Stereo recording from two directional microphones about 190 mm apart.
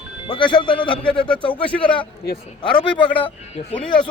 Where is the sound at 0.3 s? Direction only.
25° left (ahead or behind).